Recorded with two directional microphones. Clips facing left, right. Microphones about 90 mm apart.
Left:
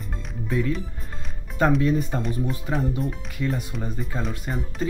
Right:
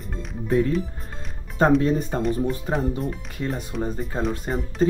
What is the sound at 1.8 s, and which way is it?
Speech, 35° right (ahead or behind).